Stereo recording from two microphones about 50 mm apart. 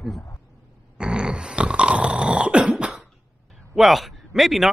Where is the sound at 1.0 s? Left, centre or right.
Centre.